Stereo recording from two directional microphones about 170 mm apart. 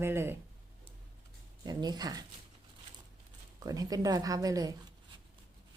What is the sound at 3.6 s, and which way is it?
Speech, 20° right (ahead or behind).